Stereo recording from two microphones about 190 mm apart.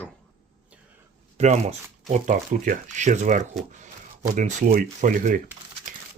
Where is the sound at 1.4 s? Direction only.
40° right (ahead or behind).